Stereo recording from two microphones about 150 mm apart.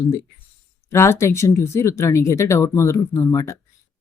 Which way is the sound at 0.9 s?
20° left (ahead or behind).